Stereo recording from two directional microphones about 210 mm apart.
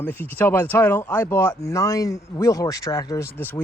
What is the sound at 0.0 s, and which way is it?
Speech, 10° left (ahead or behind).